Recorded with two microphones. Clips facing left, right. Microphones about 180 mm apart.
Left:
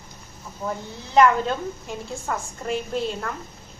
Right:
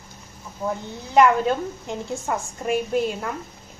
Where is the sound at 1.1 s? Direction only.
10° right (ahead or behind).